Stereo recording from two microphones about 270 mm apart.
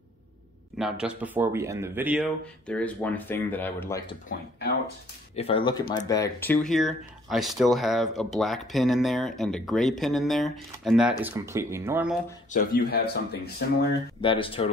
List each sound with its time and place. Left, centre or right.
0.7 s speech: centre
2.7 s speech: centre
5.3 s speech: left; by 12.2 s centre
12.5 s speech: left
14.2 s speech: centre